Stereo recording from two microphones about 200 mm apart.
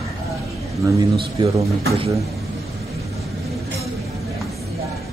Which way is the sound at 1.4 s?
30° right (ahead or behind).